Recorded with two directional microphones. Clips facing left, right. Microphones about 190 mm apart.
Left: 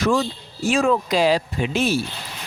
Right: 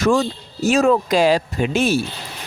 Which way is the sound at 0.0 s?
45° right (ahead or behind).